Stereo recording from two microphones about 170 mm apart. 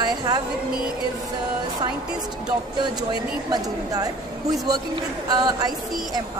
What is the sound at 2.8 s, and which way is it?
A woman's voice, 25° right (ahead or behind).